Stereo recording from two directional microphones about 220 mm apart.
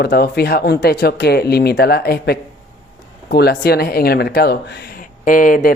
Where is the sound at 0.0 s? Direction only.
45° left (ahead or behind).